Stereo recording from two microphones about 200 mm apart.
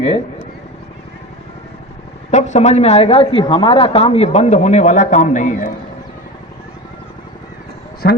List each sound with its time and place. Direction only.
2.3 s speech: 35° left (ahead or behind)
8.0 s speech: 55° left (ahead or behind)